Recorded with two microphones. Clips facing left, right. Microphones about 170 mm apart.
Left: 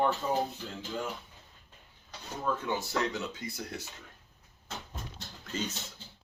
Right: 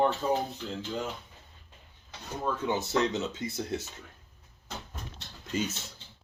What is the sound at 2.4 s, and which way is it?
Speech, 20° right (ahead or behind).